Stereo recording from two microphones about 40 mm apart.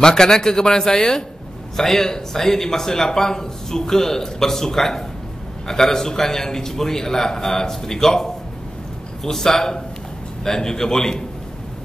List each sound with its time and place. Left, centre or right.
0.0 s speech: centre